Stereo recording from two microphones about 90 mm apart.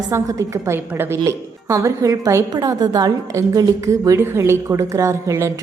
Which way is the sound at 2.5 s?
50° right (ahead or behind).